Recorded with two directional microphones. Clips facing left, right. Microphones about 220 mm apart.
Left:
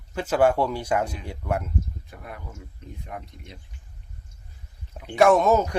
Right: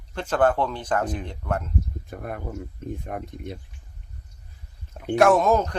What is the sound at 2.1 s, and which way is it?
Speech, 50° right (ahead or behind).